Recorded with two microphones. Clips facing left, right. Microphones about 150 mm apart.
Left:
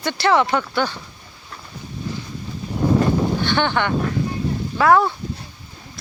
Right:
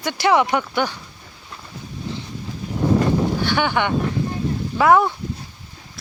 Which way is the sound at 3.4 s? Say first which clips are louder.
Even; 10° right (ahead or behind).